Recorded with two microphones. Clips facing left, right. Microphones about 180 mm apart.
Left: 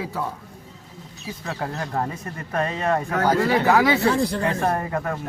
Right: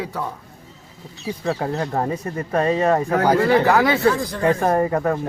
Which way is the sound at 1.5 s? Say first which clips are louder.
Right 6 dB; 25° right (ahead or behind).